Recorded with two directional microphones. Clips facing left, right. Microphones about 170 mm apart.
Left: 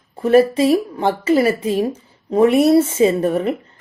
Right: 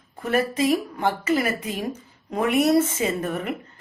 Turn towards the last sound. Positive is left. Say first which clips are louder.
# left 10 dB
turn(degrees=30)  # may be behind; listen again after turning